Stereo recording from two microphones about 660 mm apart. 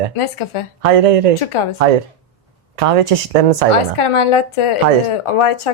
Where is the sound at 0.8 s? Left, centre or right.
Right.